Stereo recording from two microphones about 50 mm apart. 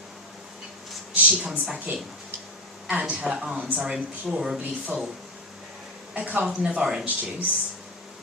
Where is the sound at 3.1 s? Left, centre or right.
Right.